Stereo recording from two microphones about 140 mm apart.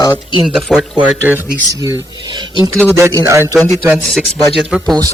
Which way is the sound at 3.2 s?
20° right (ahead or behind).